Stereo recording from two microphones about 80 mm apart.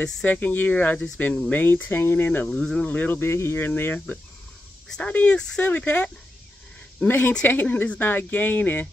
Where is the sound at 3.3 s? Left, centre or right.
Left.